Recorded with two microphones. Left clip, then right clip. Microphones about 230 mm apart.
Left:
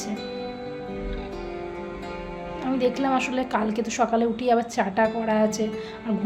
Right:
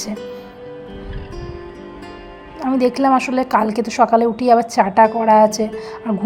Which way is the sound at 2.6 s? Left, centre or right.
Right.